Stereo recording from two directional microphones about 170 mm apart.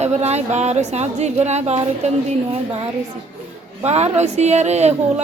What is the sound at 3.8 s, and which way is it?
A woman's voice, 40° right (ahead or behind).